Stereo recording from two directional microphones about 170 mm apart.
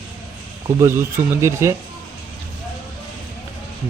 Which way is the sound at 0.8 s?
15° right (ahead or behind).